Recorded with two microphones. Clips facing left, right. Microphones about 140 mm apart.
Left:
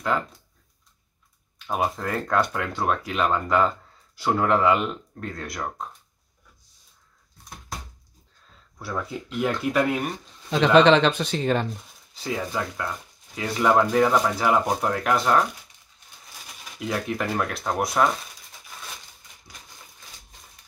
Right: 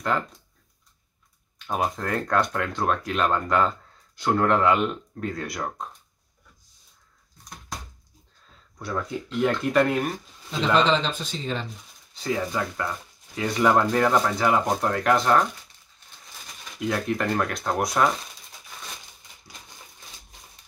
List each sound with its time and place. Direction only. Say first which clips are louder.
1.7 s speech: even; 5° left (ahead or behind)
8.7 s speech: right 1 dB; 5° left (ahead or behind)
10.5 s speech: left 6 dB; 65° left (ahead or behind)
12.1 s speech: right 2 dB; 5° left (ahead or behind)
16.8 s speech: right 2 dB; 5° left (ahead or behind)